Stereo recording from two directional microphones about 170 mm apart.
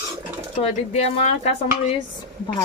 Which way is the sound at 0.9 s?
40° left (ahead or behind).